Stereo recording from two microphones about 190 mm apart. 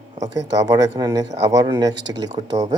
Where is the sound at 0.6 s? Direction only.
20° right (ahead or behind).